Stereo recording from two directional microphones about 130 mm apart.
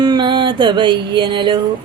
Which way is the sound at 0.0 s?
35° right (ahead or behind).